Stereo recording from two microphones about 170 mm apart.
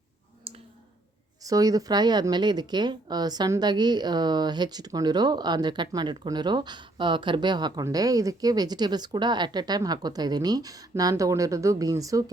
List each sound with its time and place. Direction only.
0.5 s clicking: 35° right (ahead or behind)
1.5 s speech: 20° right (ahead or behind)